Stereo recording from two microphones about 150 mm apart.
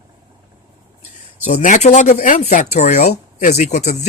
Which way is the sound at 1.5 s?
55° left (ahead or behind).